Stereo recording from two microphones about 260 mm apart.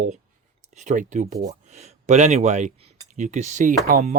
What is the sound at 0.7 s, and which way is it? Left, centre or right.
Speech, right.